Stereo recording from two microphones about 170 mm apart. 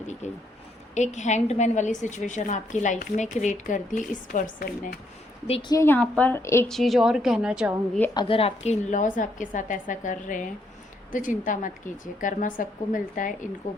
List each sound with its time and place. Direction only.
0.2 s a woman's voice: 45° left (ahead or behind)
5.5 s a woman's voice: 35° left (ahead or behind)
5.7 s a woman's voice: 15° left (ahead or behind)
6.7 s a woman's voice: centre (ahead or behind)
8.1 s a woman's voice: 30° left (ahead or behind); by 13.5 s 50° left (ahead or behind)